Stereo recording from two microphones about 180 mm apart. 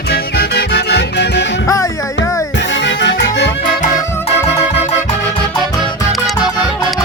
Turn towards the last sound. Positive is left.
turn(degrees=0)  # may be behind; listen again after turning